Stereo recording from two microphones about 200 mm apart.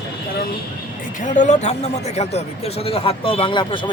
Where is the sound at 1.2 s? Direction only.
40° left (ahead or behind).